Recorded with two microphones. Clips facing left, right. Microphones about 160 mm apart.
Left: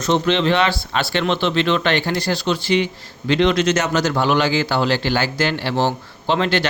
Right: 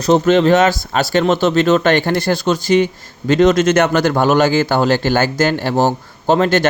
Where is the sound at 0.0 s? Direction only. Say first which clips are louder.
Right 6 dB; 45° right (ahead or behind).